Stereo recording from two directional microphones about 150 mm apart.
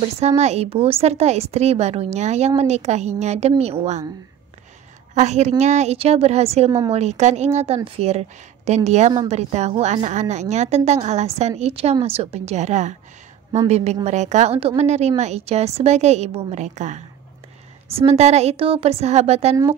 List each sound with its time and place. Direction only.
0.2 s a woman's voice: 45° right (ahead or behind)
5.1 s a woman's voice: 50° right (ahead or behind)